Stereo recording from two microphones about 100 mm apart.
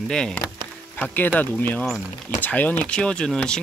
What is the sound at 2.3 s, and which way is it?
Speech, 15° left (ahead or behind).